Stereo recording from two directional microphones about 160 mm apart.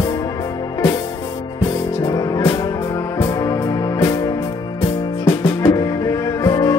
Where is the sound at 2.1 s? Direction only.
25° left (ahead or behind).